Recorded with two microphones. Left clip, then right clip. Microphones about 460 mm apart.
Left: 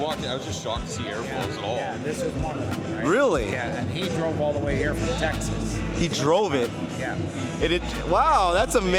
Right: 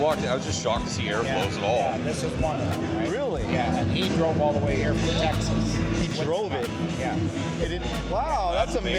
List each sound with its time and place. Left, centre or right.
0.0 s speech: centre
6.3 s speech: left
7.7 s speech: left